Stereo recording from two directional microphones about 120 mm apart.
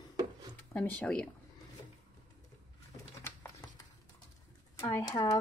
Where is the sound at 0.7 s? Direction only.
15° left (ahead or behind).